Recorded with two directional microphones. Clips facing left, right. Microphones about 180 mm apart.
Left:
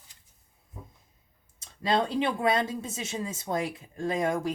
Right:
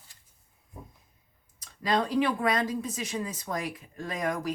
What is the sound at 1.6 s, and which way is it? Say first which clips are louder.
Speech: left 1 dB; 25° left (ahead or behind).